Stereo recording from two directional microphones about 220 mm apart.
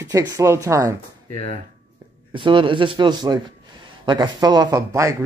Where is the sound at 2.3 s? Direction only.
20° right (ahead or behind).